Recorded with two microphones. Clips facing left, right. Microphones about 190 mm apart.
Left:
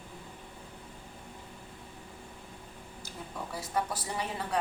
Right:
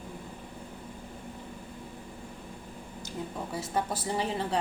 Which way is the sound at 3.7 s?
25° right (ahead or behind).